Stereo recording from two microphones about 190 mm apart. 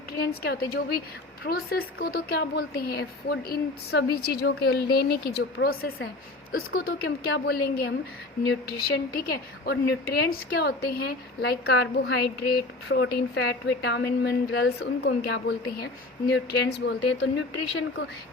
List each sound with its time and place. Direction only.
0.2 s a woman's voice: 55° left (ahead or behind)
9.2 s a woman's voice: 60° left (ahead or behind)